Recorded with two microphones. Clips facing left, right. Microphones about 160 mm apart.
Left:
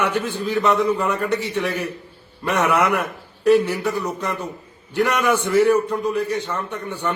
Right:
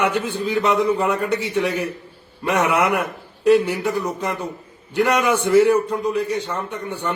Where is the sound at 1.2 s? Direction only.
10° right (ahead or behind).